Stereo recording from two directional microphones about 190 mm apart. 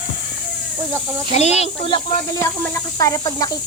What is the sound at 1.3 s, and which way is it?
Speech, 35° left (ahead or behind).